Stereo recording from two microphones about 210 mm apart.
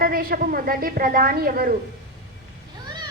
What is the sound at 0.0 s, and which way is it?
A woman's voice, 45° right (ahead or behind).